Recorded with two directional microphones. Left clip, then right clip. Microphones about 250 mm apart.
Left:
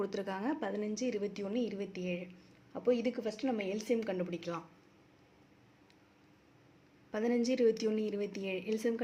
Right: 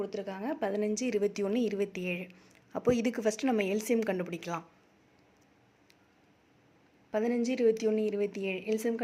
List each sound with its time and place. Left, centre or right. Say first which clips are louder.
0.0 s a woman's voice: right 1 dB; centre; by 4.6 s right
7.1 s speech: right 2 dB; centre